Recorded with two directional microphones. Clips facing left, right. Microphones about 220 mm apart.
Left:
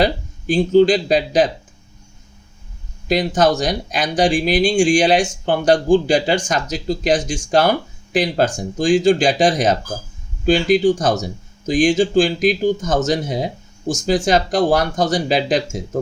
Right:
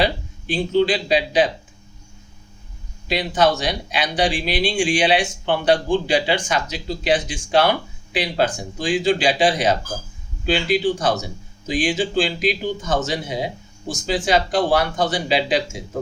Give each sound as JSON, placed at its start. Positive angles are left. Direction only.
{"t": 0.0, "sound": "speech", "side_deg": 45}
{"t": 3.1, "sound": "speech", "side_deg": 45}